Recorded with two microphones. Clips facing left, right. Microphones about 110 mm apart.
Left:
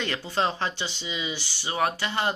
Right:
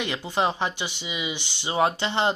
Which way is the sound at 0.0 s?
15° right (ahead or behind).